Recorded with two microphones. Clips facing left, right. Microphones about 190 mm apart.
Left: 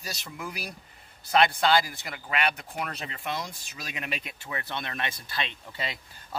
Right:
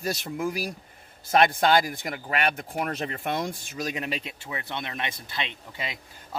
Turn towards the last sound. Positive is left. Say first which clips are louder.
# even
turn(degrees=-15)  # may be behind; listen again after turning